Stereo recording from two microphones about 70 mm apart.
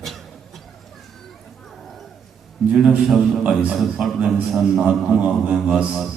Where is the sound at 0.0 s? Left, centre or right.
Centre.